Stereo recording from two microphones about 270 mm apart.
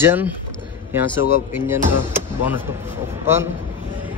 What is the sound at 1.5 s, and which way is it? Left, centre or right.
A man's voice, centre.